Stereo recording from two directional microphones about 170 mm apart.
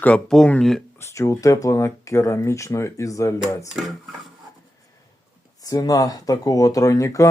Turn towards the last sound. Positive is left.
turn(degrees=20)  # may be behind; listen again after turning